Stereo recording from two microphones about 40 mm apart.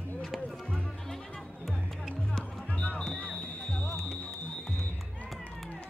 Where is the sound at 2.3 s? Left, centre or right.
Centre.